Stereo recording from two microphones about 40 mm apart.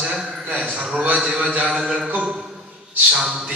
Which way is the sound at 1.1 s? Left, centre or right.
Right.